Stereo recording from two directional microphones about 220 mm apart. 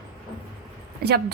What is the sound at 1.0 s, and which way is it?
Speech, 45° right (ahead or behind).